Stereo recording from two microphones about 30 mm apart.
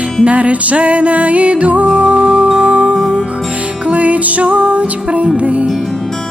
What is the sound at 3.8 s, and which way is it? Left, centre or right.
Music, right.